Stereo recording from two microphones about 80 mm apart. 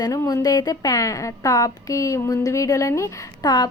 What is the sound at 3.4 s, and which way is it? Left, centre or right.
Speech, left.